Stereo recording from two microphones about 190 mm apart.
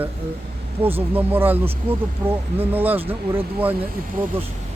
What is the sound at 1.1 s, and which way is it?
Speech, 10° right (ahead or behind).